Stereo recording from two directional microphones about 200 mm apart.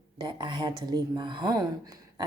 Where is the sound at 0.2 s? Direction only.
20° right (ahead or behind).